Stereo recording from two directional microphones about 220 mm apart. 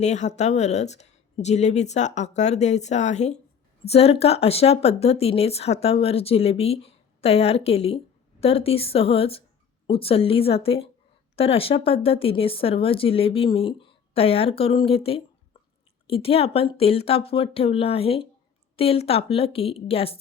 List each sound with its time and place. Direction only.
0.0 s speech: 30° left (ahead or behind)